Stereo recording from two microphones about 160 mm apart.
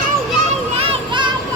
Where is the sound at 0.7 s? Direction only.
35° right (ahead or behind).